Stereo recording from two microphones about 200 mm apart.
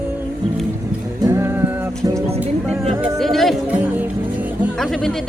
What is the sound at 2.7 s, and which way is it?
Music, centre (ahead or behind).